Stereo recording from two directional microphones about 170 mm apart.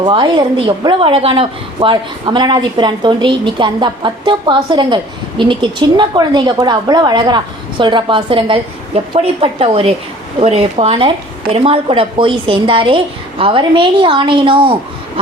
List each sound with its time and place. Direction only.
0.0 s a woman's voice: 25° right (ahead or behind)